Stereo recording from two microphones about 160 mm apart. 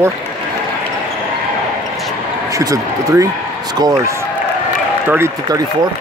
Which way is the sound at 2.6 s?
20° right (ahead or behind).